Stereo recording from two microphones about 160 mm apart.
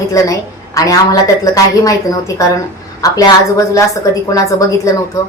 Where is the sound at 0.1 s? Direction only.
20° left (ahead or behind).